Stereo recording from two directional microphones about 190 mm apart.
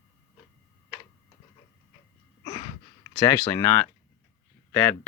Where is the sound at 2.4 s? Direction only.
25° left (ahead or behind).